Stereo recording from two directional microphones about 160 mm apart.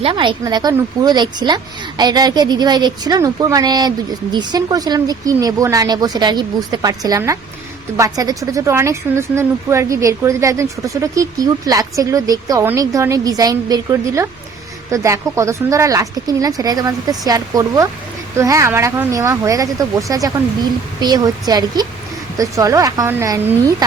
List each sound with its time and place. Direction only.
0.0 s a woman's voice: 30° right (ahead or behind)